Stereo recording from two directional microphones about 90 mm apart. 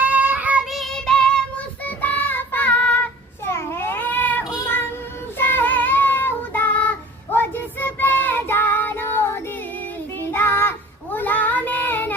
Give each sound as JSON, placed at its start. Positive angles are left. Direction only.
{"t": 0.0, "sound": "child singing", "side_deg": -20}
{"t": 0.6, "sound": "child singing", "side_deg": 0}
{"t": 1.8, "sound": "child singing", "side_deg": 20}
{"t": 3.4, "sound": "child singing", "side_deg": 25}